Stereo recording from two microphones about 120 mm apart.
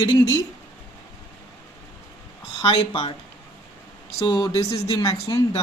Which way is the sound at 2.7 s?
50° left (ahead or behind).